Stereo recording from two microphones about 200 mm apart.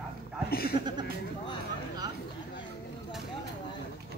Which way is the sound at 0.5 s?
50° left (ahead or behind).